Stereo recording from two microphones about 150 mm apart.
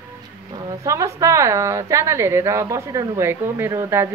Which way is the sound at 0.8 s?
20° right (ahead or behind).